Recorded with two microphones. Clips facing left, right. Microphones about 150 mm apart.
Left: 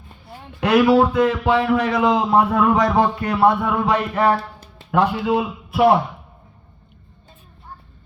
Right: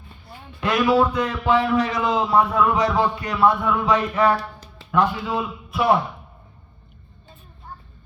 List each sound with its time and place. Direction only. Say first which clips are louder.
0.6 s speech: left 4 dB; 75° left (ahead or behind)
1.1 s a man's voice: left 3 dB; 50° left (ahead or behind)